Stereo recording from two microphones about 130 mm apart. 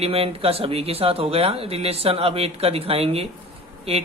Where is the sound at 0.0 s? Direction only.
50° right (ahead or behind).